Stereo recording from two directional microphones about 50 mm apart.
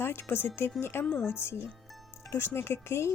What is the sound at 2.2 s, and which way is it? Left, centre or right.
Speech, left.